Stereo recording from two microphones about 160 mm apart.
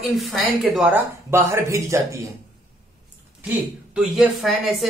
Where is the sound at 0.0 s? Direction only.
Centre (ahead or behind).